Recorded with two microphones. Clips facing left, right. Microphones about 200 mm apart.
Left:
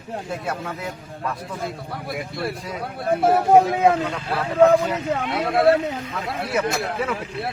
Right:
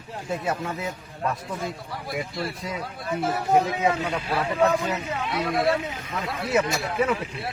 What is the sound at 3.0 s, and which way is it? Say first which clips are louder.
Speech: left 8 dB; 55° left (ahead or behind).